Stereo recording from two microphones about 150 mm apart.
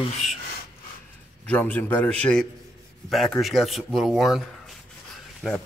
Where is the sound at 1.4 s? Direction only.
10° left (ahead or behind).